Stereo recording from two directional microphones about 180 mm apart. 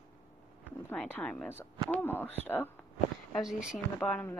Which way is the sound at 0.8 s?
10° left (ahead or behind).